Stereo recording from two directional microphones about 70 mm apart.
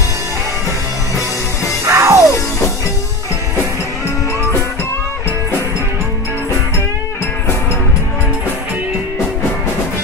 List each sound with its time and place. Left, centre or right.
1.9 s music: right